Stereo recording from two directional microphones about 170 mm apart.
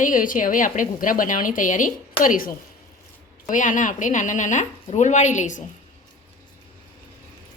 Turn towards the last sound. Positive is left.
turn(degrees=45)  # may be behind; listen again after turning